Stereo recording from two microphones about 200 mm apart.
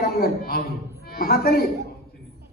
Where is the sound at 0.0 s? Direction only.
50° left (ahead or behind).